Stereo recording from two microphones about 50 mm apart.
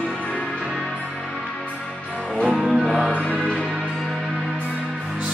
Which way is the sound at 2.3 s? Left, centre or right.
Centre.